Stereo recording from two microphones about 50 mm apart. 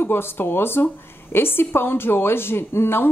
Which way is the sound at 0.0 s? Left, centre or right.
Left.